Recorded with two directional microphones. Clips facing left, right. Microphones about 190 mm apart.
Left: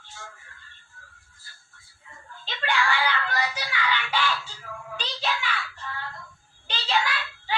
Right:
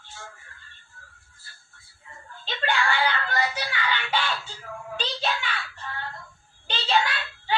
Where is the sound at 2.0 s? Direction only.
30° right (ahead or behind).